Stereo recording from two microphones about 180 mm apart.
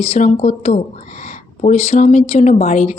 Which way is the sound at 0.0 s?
35° left (ahead or behind).